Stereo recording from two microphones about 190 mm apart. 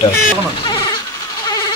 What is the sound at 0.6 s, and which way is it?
Sheep, 25° left (ahead or behind).